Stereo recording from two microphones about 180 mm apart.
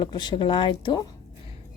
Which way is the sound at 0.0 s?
25° left (ahead or behind).